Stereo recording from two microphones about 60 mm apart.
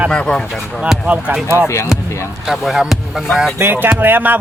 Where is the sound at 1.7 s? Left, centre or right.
Left.